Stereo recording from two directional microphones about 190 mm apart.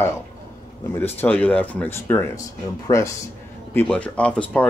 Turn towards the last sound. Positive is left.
turn(degrees=5)  # may be behind; listen again after turning